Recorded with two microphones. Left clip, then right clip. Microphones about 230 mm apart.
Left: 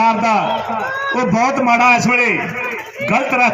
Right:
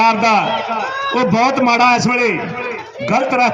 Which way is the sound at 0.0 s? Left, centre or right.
Right.